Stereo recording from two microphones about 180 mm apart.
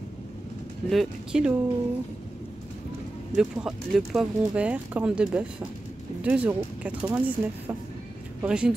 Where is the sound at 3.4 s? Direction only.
5° right (ahead or behind).